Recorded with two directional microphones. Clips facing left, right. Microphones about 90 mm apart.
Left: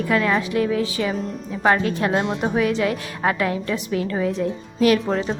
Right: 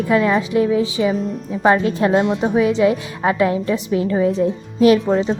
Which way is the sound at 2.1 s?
5° right (ahead or behind).